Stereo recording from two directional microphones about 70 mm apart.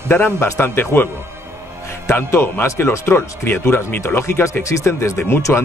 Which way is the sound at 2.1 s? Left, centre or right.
Left.